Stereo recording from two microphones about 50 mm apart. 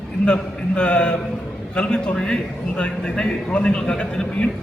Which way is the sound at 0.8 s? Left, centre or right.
Left.